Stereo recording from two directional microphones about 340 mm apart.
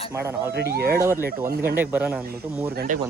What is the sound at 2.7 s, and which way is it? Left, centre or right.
Speech, right.